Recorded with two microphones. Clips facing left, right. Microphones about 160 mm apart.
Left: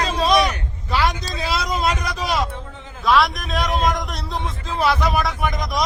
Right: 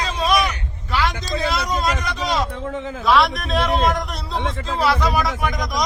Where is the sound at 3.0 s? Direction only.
Centre (ahead or behind).